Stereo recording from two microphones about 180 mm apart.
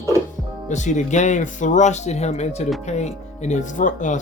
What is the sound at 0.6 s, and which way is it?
Speech, 40° left (ahead or behind).